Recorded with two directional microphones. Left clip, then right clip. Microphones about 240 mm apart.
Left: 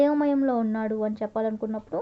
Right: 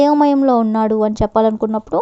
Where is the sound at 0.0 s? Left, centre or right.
Right.